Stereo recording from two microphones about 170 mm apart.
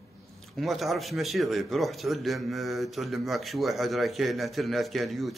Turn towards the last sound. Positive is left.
turn(degrees=0)  # may be behind; listen again after turning